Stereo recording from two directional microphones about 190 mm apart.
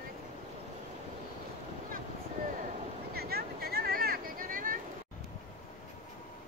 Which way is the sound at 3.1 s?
55° right (ahead or behind).